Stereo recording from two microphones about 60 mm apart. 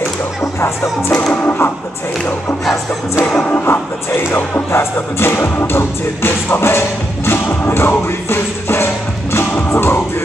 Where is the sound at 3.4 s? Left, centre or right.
Left.